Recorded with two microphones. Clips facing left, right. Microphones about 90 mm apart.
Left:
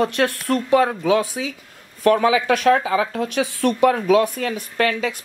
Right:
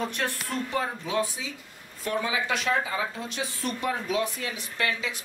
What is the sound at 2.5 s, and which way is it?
Speech, 60° left (ahead or behind).